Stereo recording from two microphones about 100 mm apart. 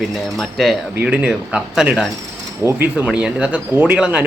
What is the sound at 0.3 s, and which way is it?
Speech, centre (ahead or behind).